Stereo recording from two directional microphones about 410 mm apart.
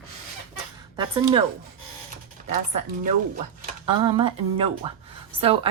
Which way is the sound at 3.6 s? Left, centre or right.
Centre.